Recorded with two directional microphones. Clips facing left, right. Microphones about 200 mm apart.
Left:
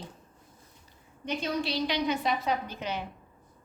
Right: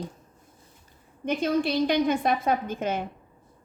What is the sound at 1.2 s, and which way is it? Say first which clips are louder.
A woman's voice: right 7 dB; 50° right (ahead or behind).